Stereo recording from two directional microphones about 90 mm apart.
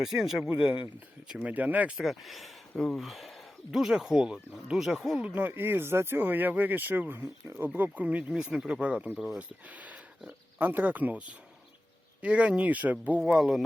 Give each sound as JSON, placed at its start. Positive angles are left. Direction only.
{"t": 0.0, "sound": "speech", "side_deg": -5}
{"t": 2.0, "sound": "speech", "side_deg": 0}
{"t": 5.2, "sound": "speech", "side_deg": -20}
{"t": 9.4, "sound": "speech", "side_deg": -15}
{"t": 13.2, "sound": "speech", "side_deg": -5}